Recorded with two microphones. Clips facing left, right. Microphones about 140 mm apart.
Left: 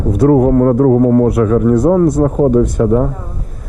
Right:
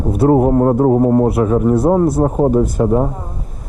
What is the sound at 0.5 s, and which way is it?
Speech, 20° right (ahead or behind).